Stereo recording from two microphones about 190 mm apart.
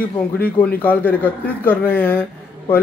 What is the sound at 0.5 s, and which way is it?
Speech, 10° left (ahead or behind).